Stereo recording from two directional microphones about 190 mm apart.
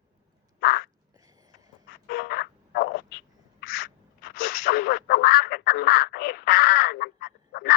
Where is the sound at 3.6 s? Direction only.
50° left (ahead or behind).